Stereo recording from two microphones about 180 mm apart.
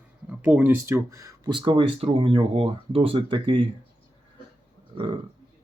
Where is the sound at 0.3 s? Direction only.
10° right (ahead or behind); by 3.7 s 25° right (ahead or behind).